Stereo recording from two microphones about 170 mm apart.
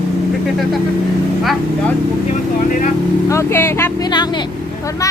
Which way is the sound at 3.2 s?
15° left (ahead or behind).